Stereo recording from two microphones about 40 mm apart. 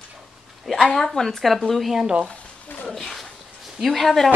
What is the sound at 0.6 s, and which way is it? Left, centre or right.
Speech, centre.